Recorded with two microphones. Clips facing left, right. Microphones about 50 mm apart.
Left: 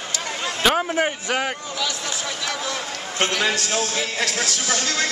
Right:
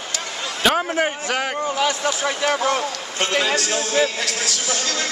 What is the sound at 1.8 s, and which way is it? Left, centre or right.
Speech, right.